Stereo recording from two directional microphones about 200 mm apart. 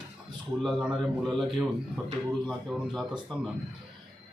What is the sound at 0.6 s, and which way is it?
Speech, centre (ahead or behind).